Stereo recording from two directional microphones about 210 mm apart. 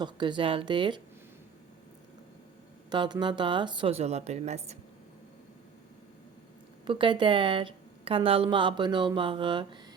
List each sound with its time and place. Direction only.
0.0 s a woman's voice: 20° right (ahead or behind)
2.9 s a woman's voice: 20° right (ahead or behind)
6.8 s a woman's voice: 25° right (ahead or behind)